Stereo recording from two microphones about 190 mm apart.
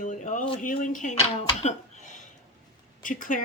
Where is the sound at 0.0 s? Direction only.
40° left (ahead or behind).